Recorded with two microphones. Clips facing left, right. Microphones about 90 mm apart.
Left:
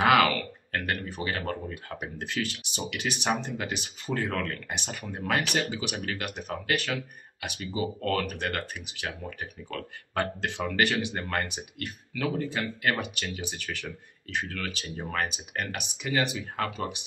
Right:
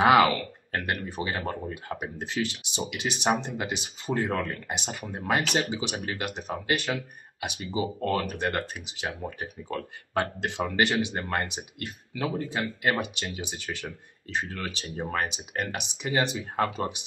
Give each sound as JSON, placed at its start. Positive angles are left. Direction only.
{"t": 0.0, "sound": "speech", "side_deg": -25}